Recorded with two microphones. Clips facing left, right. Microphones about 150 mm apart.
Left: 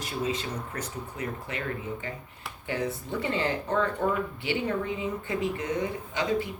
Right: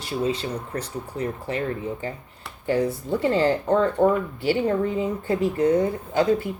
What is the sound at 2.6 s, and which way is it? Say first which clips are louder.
Speech: right 8 dB; 35° right (ahead or behind).